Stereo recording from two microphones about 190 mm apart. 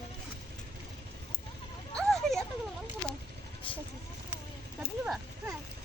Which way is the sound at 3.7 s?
25° left (ahead or behind).